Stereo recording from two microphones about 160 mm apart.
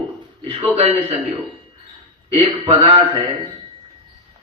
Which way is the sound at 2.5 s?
30° right (ahead or behind).